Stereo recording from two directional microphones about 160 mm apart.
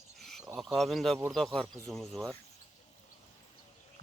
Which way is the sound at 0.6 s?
Centre (ahead or behind).